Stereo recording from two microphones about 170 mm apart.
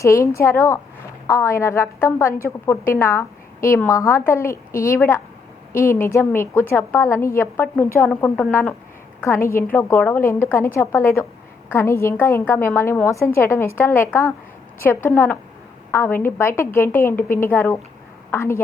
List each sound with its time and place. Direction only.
0.0 s a woman's voice: 15° left (ahead or behind)